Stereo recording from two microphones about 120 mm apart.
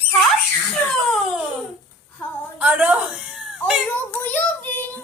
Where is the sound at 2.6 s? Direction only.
10° right (ahead or behind).